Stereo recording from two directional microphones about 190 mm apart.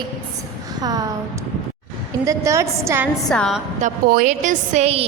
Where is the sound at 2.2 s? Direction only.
15° right (ahead or behind).